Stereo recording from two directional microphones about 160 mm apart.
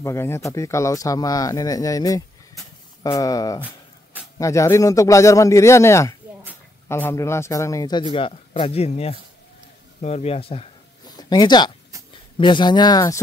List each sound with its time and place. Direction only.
0.0 s speech: 15° left (ahead or behind)
3.6 s a sound: 10° right (ahead or behind)
4.4 s speech: 20° left (ahead or behind); by 10.7 s 35° left (ahead or behind)
11.1 s speech: 25° left (ahead or behind)